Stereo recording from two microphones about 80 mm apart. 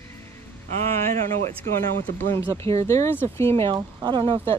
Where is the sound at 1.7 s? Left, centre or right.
Left.